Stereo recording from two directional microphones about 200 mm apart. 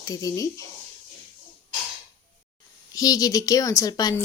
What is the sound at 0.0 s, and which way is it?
Speech, 15° left (ahead or behind).